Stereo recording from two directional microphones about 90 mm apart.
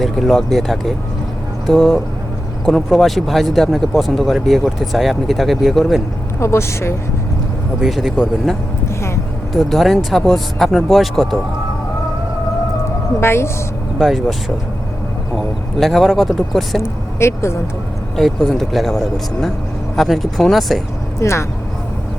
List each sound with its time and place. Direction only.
0.0 s speech: centre (ahead or behind)
6.4 s a woman's voice: 30° left (ahead or behind)
7.8 s speech: centre (ahead or behind)
9.6 s speech: centre (ahead or behind)
13.1 s a woman's voice: 30° left (ahead or behind)
14.0 s speech: 5° right (ahead or behind)
15.4 s speech: centre (ahead or behind)
16.8 s speech: 30° left (ahead or behind)
18.2 s speech: centre (ahead or behind)
21.2 s a woman's voice: 35° left (ahead or behind)